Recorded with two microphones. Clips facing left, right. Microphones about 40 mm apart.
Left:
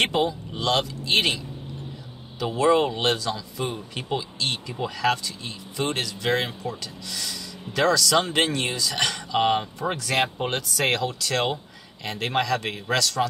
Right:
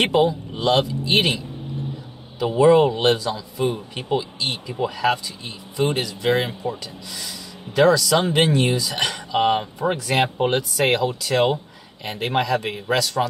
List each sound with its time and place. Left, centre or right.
0.0 s speech: centre
11.5 s a sound: right
12.2 s speech: centre